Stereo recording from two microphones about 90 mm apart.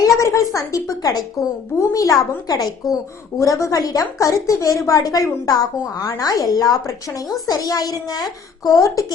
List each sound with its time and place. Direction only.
0.0 s a woman's voice: 35° left (ahead or behind)